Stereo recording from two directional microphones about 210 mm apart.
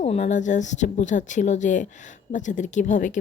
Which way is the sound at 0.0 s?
30° left (ahead or behind).